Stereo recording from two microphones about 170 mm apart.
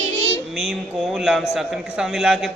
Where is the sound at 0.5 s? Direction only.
Centre (ahead or behind).